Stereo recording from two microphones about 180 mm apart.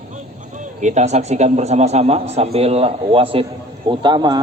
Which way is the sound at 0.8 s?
40° right (ahead or behind).